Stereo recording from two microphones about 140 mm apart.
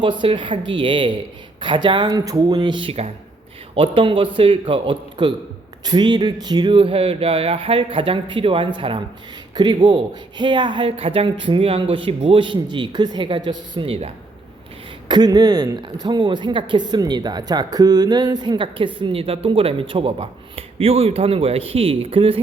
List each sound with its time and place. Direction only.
0.0 s speech: 35° right (ahead or behind)
15.0 s a man's voice: 30° right (ahead or behind)